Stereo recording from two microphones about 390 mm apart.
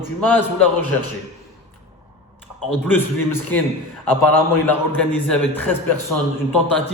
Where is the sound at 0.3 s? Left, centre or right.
Centre.